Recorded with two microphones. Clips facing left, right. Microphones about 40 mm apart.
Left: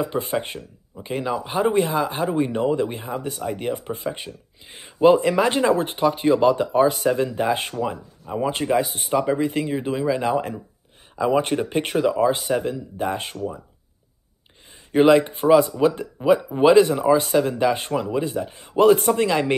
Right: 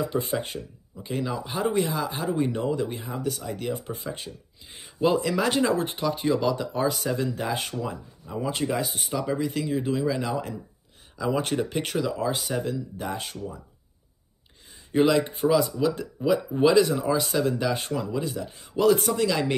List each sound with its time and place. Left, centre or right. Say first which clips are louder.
0.0 s speech: left 3 dB; left
11.1 s speech: left 5 dB; left
14.9 s speech: left 6 dB; left